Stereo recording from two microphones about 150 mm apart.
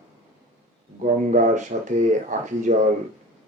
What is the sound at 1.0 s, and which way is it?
Speech, 55° right (ahead or behind).